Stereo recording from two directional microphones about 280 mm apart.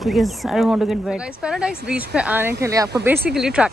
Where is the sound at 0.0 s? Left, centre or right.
Centre.